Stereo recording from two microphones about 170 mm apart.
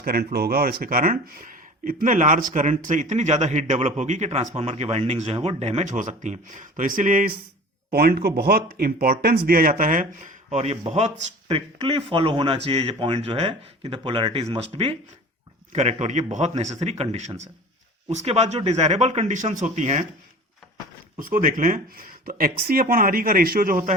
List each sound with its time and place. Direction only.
0.0 s speech: 60° right (ahead or behind)
7.9 s speech: 65° right (ahead or behind); by 20.1 s 40° right (ahead or behind)
21.2 s speech: 55° right (ahead or behind)